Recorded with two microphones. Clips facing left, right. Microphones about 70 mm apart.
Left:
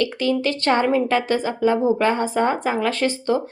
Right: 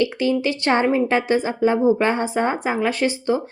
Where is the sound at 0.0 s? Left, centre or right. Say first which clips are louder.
Right 1 dB; centre.